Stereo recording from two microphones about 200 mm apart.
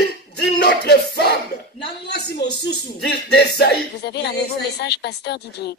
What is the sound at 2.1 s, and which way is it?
Speech, 55° left (ahead or behind).